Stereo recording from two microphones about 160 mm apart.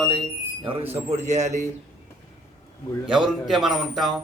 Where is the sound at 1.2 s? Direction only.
45° right (ahead or behind).